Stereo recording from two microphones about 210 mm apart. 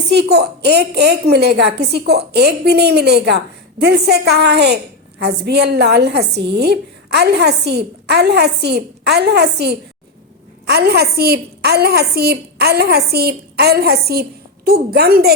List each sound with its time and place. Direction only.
0.1 s a woman's voice: 50° right (ahead or behind)